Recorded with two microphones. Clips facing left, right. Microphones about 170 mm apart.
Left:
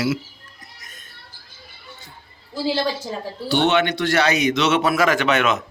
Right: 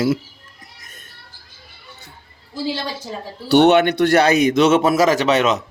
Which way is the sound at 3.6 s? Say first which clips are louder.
Right 6 dB; 45° right (ahead or behind).